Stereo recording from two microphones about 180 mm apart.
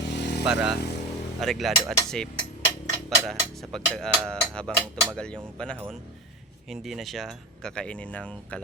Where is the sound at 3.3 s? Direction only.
Centre (ahead or behind).